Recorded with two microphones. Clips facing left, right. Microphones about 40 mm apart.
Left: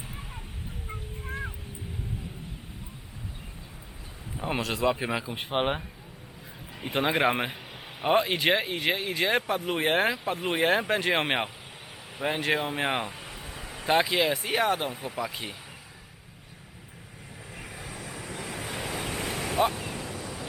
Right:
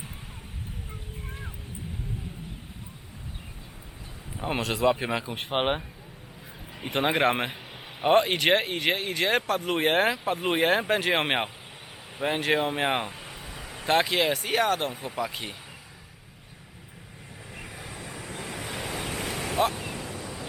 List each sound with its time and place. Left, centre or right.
1.3 s a sound: centre
4.4 s speech: centre
5.5 s speech: centre
7.3 s a man's voice: right
8.5 s speech: right
8.8 s speech: centre
17.5 s waves: centre